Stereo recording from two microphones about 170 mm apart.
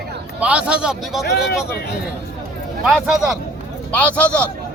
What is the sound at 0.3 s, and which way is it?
Speech, 5° right (ahead or behind).